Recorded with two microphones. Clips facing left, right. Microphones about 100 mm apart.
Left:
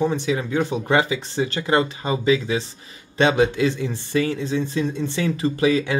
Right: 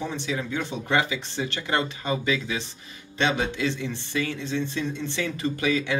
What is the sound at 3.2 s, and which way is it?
Speech, 45° left (ahead or behind).